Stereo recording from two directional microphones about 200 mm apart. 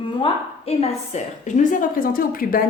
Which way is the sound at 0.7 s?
30° left (ahead or behind).